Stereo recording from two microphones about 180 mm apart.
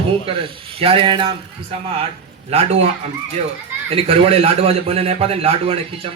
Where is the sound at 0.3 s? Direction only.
30° right (ahead or behind).